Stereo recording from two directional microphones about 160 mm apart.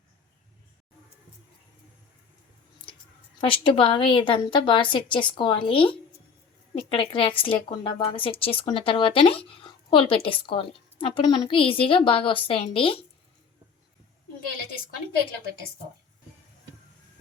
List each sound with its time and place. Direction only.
3.4 s a woman's voice: 30° left (ahead or behind)